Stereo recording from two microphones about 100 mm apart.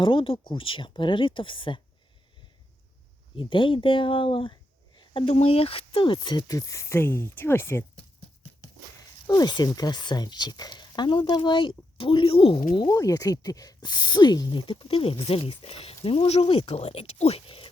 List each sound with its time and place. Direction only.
0.0 s speech: 60° left (ahead or behind)
3.3 s speech: 60° left (ahead or behind)
5.1 s speech: 80° left; by 7.9 s 25° left (ahead or behind)
9.2 s speech: 40° left (ahead or behind); by 12.9 s 60° left (ahead or behind)
12.9 s speech: 35° left (ahead or behind)
14.7 s speech: 65° left (ahead or behind)